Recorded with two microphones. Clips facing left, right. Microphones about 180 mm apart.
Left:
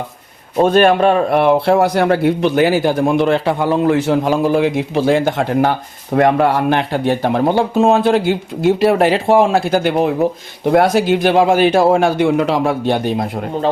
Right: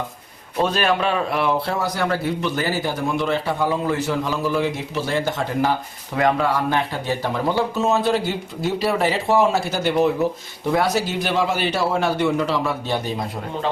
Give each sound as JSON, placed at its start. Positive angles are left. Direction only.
{"t": 0.6, "sound": "speech", "side_deg": 50}
{"t": 9.2, "sound": "speech", "side_deg": 50}